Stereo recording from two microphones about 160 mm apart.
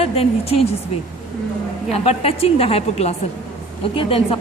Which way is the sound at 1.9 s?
40° left (ahead or behind).